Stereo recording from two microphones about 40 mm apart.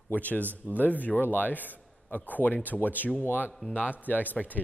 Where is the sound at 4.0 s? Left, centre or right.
Left.